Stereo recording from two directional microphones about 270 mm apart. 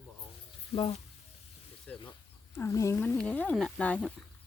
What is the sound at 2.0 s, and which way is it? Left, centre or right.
Speech, centre.